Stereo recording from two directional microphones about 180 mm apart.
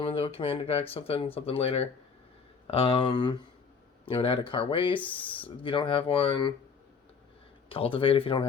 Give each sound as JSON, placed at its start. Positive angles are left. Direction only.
{"t": 0.0, "sound": "speech", "side_deg": 30}
{"t": 7.7, "sound": "speech", "side_deg": 30}